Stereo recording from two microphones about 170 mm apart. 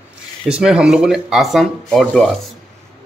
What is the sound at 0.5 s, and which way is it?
Speech, 5° right (ahead or behind).